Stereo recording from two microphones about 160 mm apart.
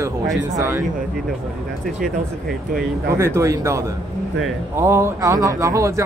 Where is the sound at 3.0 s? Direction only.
15° right (ahead or behind).